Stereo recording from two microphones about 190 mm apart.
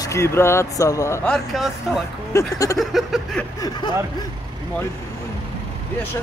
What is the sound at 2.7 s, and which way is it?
Speech, centre (ahead or behind).